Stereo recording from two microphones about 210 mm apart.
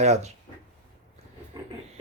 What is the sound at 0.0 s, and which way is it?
Speech, 30° right (ahead or behind).